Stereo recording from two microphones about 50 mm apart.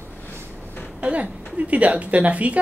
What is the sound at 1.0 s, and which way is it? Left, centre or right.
A woman's voice, right.